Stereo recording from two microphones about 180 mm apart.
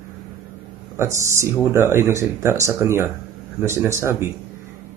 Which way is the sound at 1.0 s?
15° right (ahead or behind).